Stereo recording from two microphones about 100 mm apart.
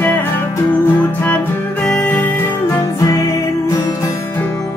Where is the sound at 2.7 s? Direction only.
35° left (ahead or behind).